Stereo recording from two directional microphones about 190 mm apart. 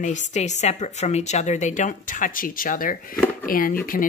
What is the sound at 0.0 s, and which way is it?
Speech, 40° left (ahead or behind).